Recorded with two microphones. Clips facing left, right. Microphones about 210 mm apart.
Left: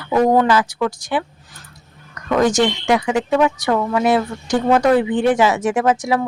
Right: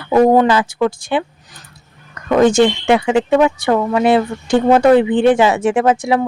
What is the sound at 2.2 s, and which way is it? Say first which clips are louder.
Speech: right 5 dB; 25° right (ahead or behind).